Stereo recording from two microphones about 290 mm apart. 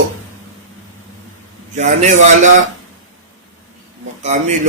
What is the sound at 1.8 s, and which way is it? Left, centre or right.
Speech, right.